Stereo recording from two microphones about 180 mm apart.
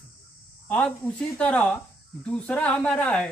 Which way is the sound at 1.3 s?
5° left (ahead or behind).